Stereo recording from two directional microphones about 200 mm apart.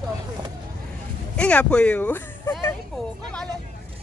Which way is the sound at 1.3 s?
5° left (ahead or behind).